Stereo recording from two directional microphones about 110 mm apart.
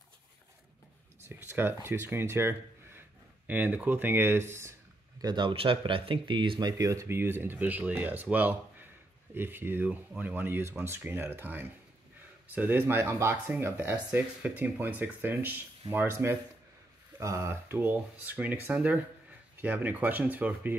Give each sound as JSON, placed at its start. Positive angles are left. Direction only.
{"t": 1.3, "sound": "speech", "side_deg": -20}
{"t": 5.2, "sound": "speech", "side_deg": -45}
{"t": 6.8, "sound": "speech", "side_deg": -30}